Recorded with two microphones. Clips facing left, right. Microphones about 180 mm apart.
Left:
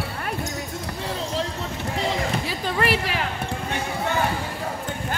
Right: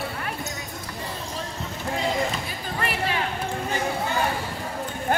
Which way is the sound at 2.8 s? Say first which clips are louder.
Left 3 dB; 90° left.